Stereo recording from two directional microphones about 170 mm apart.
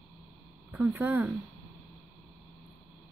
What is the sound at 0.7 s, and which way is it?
Speech, 10° right (ahead or behind).